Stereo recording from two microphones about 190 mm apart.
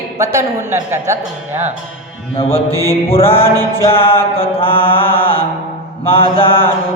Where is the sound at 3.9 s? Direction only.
30° left (ahead or behind).